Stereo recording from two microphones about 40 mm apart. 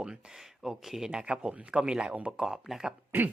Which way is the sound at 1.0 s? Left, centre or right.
Right.